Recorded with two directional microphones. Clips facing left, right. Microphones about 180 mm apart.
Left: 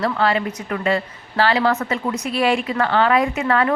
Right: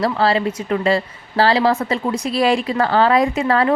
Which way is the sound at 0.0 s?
35° right (ahead or behind).